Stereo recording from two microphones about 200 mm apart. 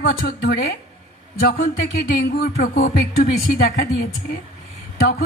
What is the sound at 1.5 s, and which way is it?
Speech, 50° left (ahead or behind).